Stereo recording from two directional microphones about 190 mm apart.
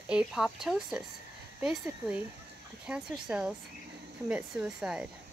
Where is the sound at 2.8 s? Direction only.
5° right (ahead or behind).